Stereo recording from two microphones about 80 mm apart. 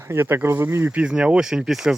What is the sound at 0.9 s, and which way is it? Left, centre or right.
Speech, centre.